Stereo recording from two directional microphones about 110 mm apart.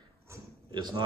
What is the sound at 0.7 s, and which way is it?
Speech, 40° right (ahead or behind).